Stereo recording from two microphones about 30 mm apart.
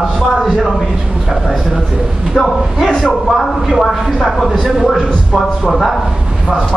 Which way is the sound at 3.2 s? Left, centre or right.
Centre.